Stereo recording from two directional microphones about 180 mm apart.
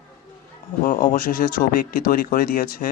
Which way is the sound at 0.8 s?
50° left (ahead or behind).